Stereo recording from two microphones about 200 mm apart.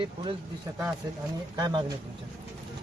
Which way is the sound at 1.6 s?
20° right (ahead or behind).